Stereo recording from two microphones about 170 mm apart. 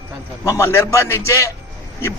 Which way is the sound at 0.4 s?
15° left (ahead or behind).